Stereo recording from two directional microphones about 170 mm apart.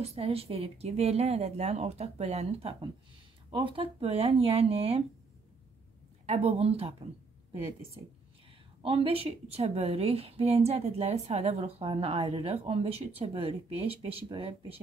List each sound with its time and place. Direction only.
0.0 s a woman's voice: 35° right (ahead or behind)
6.2 s a woman's voice: 40° right (ahead or behind)
8.8 s a woman's voice: 35° right (ahead or behind)